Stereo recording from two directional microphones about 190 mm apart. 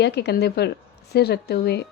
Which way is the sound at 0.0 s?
60° left (ahead or behind).